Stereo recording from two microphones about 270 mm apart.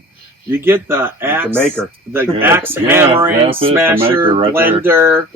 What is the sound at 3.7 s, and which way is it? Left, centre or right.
Speech, centre.